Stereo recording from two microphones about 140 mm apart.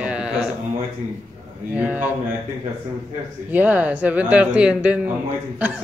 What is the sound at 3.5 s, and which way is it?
A man's voice, 10° right (ahead or behind).